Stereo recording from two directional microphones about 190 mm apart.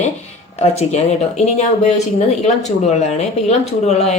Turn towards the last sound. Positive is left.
turn(degrees=35)  # may be behind; listen again after turning